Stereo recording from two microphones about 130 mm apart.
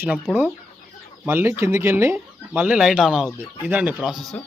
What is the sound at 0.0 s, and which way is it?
Speech, 10° right (ahead or behind).